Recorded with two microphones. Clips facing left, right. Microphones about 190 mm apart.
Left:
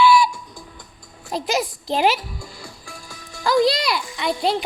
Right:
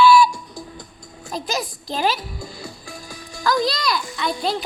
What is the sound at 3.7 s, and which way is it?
Speech, 30° left (ahead or behind).